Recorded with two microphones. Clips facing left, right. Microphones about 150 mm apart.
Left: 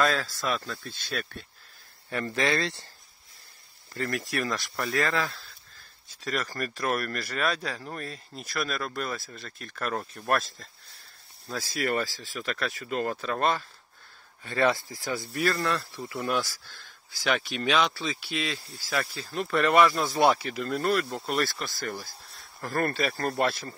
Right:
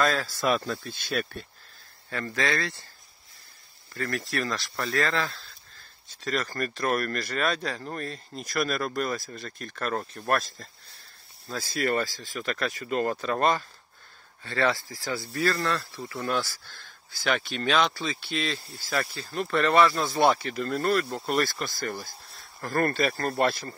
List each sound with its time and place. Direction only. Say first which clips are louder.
0.0 s speech: even; centre (ahead or behind)
0.4 s speech: right 5 dB; 20° right (ahead or behind)
2.0 s speech: left 1 dB; 20° left (ahead or behind)
3.9 s speech: even; 20° left (ahead or behind); by 13.7 s centre (ahead or behind)
14.4 s speech: left 1 dB; 20° left (ahead or behind); by 23.7 s centre (ahead or behind)